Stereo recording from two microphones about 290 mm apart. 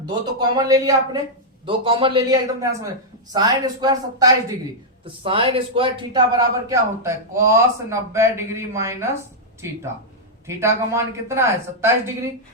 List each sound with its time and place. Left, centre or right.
0.3 s a man's voice: centre